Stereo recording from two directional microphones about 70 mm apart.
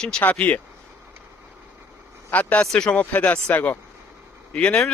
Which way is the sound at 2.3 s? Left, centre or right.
Left.